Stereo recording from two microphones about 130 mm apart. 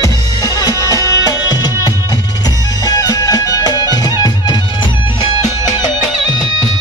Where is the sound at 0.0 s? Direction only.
30° left (ahead or behind).